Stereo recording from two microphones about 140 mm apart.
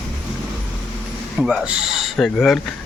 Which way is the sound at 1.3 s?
5° right (ahead or behind).